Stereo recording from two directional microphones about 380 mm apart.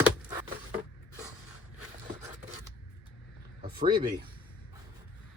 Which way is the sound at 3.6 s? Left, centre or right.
Centre.